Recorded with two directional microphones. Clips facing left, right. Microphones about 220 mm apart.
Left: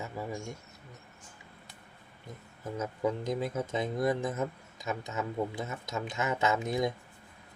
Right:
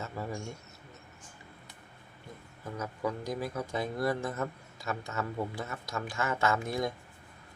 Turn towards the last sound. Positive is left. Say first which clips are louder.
# left 1 dB
turn(degrees=20)  # may be behind; listen again after turning